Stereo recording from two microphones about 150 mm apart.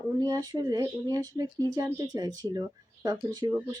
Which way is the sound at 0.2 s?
25° right (ahead or behind).